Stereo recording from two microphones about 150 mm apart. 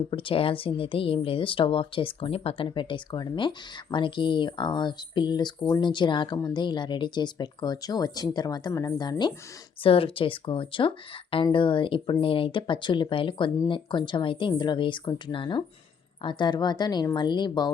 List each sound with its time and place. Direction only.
0.1 s speech: 35° left (ahead or behind)